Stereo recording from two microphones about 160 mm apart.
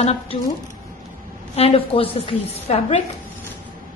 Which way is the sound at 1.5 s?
40° left (ahead or behind).